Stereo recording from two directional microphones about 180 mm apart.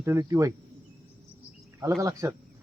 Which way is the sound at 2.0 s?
15° right (ahead or behind).